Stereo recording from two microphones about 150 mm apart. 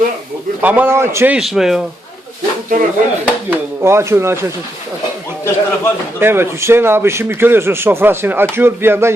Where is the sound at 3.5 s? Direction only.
15° right (ahead or behind).